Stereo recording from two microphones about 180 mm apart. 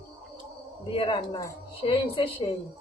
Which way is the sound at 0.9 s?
30° left (ahead or behind).